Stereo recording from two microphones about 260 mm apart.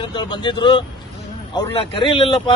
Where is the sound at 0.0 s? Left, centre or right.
Centre.